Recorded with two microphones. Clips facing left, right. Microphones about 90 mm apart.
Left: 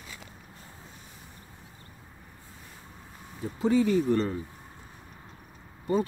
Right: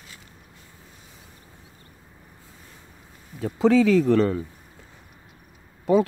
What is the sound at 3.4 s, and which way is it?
Speech, 90° right.